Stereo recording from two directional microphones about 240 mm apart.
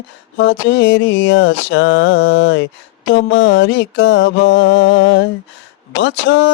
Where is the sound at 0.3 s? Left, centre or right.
Left.